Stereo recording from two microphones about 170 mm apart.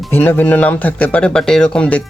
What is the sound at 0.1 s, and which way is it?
Speech, 10° left (ahead or behind).